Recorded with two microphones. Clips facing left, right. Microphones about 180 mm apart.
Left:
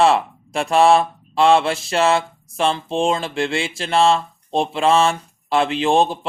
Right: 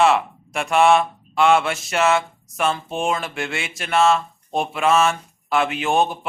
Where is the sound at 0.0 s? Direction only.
30° left (ahead or behind).